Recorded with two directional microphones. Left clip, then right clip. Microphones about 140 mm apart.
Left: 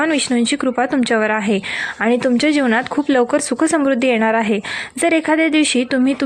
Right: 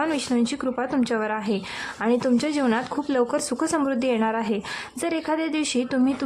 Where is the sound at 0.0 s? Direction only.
30° left (ahead or behind).